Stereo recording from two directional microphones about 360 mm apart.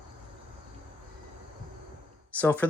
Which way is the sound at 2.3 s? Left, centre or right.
Centre.